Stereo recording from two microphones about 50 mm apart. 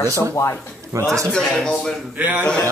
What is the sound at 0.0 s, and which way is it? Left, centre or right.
Speech, left.